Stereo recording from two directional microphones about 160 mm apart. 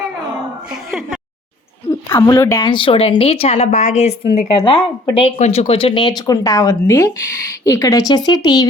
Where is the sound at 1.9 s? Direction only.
20° left (ahead or behind).